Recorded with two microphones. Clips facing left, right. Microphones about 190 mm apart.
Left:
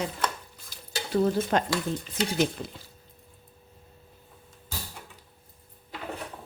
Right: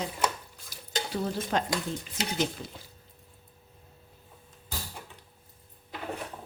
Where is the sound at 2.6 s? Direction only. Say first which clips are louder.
Left 4 dB; 70° left (ahead or behind).